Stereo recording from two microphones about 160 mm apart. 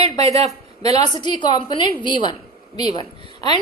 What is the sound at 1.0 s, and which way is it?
A woman's voice, 25° left (ahead or behind).